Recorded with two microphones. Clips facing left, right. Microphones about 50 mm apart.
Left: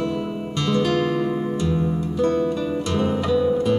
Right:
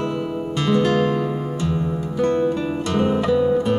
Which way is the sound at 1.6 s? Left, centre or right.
Right.